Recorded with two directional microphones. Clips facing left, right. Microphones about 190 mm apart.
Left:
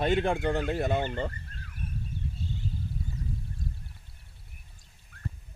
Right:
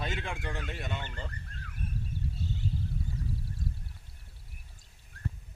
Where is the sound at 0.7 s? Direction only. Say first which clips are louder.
Left 11 dB; 40° left (ahead or behind).